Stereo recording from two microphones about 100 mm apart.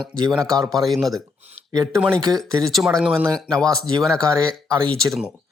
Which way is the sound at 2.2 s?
40° right (ahead or behind).